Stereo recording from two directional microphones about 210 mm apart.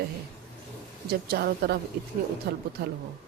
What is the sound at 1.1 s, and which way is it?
Speech, 45° right (ahead or behind).